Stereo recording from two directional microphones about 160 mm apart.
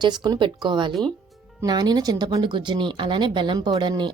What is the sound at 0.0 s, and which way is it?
A woman's voice, 25° right (ahead or behind).